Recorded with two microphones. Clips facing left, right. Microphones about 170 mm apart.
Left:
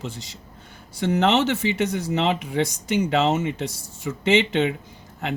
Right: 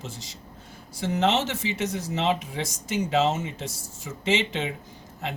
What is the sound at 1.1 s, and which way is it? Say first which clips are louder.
Speech: left 4 dB; 65° left (ahead or behind).